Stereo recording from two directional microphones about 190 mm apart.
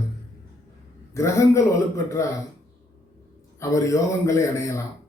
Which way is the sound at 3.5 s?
15° left (ahead or behind).